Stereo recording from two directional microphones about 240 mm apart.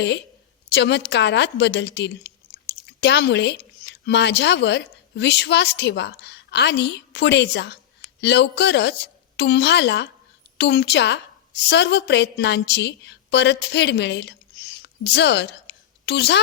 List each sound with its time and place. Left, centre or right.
0.7 s a woman's voice: left